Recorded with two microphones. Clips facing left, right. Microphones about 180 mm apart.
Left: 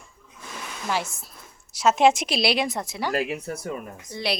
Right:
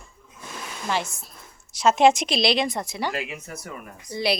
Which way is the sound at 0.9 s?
5° left (ahead or behind).